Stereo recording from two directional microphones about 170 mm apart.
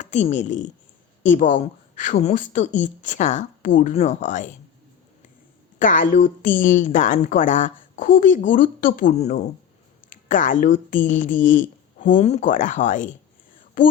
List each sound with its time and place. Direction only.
0.0 s a woman's voice: 45° left (ahead or behind)
5.8 s a woman's voice: 50° left (ahead or behind)
11.4 s a sound: 50° left (ahead or behind)
12.1 s a woman's voice: 40° left (ahead or behind)